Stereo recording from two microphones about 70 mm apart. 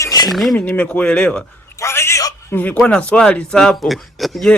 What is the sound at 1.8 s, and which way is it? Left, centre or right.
Speech, left.